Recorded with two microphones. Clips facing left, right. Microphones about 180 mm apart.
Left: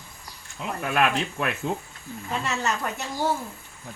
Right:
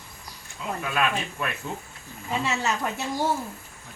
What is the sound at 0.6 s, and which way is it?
Speech, 60° left (ahead or behind).